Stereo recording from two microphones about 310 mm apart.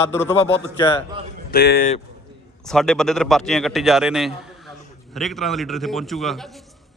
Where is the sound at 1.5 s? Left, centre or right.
Left.